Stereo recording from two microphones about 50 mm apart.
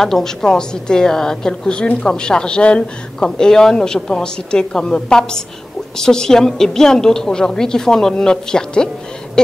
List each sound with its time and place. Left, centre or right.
0.0 s a woman's voice: centre